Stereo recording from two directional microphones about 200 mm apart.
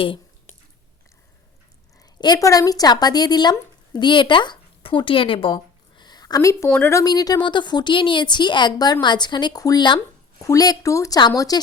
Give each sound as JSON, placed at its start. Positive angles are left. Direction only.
{"t": 2.0, "sound": "a woman's voice", "side_deg": 20}